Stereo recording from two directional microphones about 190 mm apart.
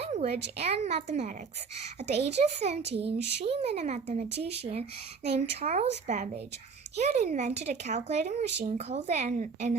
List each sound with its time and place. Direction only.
0.0 s a sound: 35° right (ahead or behind)
0.6 s a woman's voice: 35° right (ahead or behind)
3.1 s speech: 60° right (ahead or behind)
3.4 s a woman's voice: 30° right (ahead or behind)